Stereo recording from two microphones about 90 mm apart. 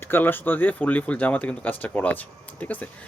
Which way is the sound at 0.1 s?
20° left (ahead or behind).